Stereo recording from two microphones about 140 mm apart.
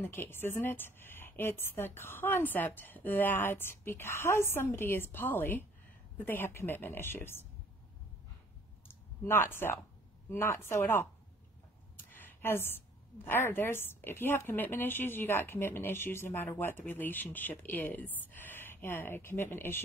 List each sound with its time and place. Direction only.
0.0 s a woman's voice: 15° left (ahead or behind)
8.8 s a sound: 15° left (ahead or behind)
10.3 s a woman's voice: 15° left (ahead or behind)
12.1 s a woman's voice: 15° left (ahead or behind)